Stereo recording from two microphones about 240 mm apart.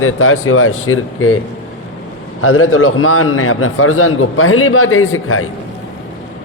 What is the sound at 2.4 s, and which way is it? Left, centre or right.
A man's voice, left.